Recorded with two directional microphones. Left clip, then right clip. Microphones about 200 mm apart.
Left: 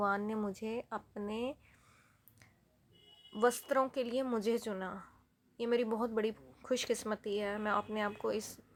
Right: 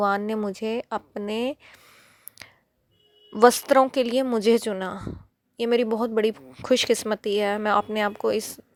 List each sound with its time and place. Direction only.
0.0 s a woman's voice: 40° right (ahead or behind)